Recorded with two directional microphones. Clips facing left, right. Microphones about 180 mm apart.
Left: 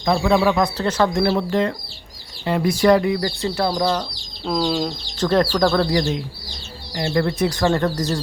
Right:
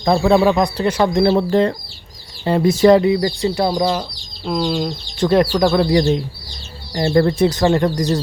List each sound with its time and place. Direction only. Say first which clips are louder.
0.4 s speech: right 3 dB; 15° right (ahead or behind)
1.2 s speech: right 5 dB; 30° right (ahead or behind)
4.4 s speech: right 1 dB; centre (ahead or behind)
5.1 s speech: right 4 dB; 10° right (ahead or behind)
6.9 s speech: right 6 dB; 35° right (ahead or behind); by 8.2 s 15° right (ahead or behind)